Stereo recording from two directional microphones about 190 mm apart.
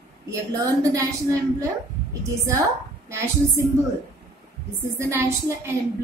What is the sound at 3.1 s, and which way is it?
Speech, 15° right (ahead or behind).